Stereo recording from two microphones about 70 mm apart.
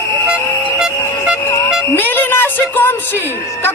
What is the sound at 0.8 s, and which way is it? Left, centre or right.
Music, centre.